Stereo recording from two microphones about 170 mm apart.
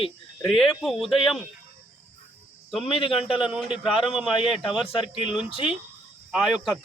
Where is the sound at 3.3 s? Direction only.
5° right (ahead or behind).